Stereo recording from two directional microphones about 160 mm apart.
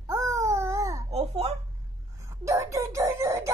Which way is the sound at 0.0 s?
20° right (ahead or behind).